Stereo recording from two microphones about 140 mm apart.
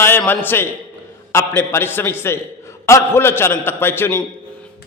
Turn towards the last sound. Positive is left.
turn(degrees=15)  # may be behind; listen again after turning